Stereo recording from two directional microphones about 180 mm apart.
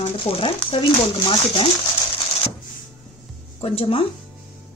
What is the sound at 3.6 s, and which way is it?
Speech, 30° left (ahead or behind).